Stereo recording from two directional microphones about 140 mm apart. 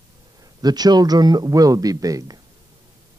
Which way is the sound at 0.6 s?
30° right (ahead or behind).